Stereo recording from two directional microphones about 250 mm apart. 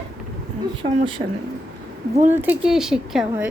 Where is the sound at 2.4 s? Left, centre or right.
Centre.